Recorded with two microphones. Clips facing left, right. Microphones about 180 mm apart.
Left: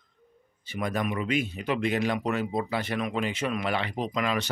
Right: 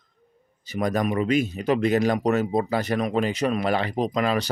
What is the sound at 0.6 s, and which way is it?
Speech, 40° right (ahead or behind).